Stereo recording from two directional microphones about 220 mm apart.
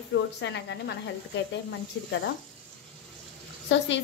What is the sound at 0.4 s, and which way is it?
Speech, 55° left (ahead or behind).